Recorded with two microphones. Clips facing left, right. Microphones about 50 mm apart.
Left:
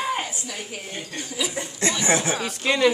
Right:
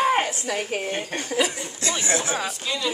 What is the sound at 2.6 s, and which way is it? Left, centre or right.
Speech, left.